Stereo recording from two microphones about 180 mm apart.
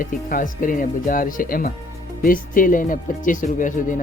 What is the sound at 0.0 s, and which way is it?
Speech, 50° left (ahead or behind).